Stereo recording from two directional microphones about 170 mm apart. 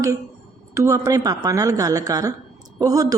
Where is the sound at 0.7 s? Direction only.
20° right (ahead or behind).